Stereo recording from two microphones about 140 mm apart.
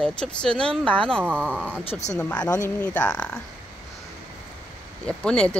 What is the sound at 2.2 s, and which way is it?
Speech, 10° left (ahead or behind).